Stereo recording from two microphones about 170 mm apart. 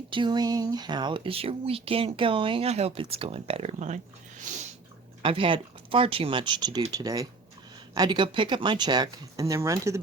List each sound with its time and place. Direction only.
0.1 s speech: 25° right (ahead or behind); by 4.0 s 45° right (ahead or behind)
5.2 s speech: 30° right (ahead or behind)